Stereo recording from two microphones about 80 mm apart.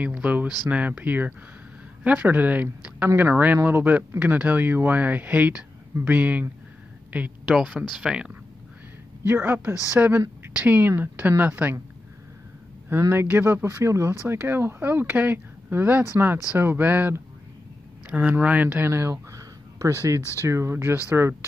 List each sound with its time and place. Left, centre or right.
0.0 s speech: centre
9.2 s speech: right
13.1 s speech: right
18.9 s a sound: right
20.2 s speech: left
20.4 s speech: right